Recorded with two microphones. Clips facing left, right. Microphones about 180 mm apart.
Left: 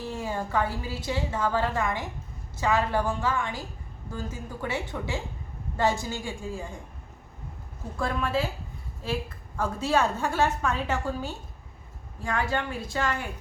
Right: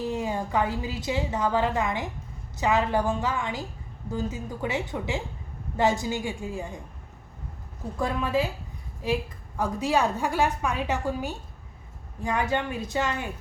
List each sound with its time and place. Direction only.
0.0 s a woman's voice: 20° right (ahead or behind)
7.9 s a woman's voice: 15° right (ahead or behind)